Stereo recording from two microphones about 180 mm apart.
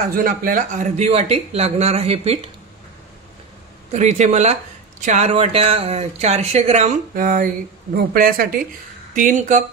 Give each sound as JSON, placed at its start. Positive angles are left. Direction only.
{"t": 0.0, "sound": "speech", "side_deg": -50}
{"t": 3.9, "sound": "speech", "side_deg": -40}